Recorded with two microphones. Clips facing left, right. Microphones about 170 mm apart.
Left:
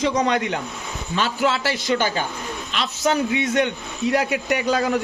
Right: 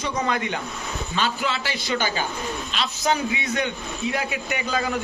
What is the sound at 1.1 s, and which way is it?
Speech, 60° left (ahead or behind).